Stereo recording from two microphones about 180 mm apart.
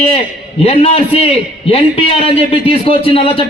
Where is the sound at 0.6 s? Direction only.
35° left (ahead or behind).